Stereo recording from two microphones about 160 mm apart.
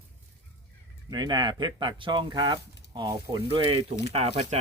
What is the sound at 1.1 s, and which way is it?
Speech, 25° right (ahead or behind).